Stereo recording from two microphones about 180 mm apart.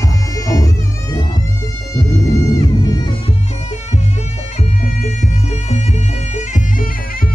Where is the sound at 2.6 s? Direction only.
20° left (ahead or behind).